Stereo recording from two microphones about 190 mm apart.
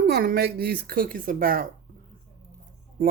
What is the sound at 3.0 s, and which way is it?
Music, 45° right (ahead or behind).